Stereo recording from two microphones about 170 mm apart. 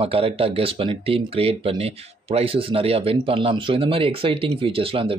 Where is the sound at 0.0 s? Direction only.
35° right (ahead or behind).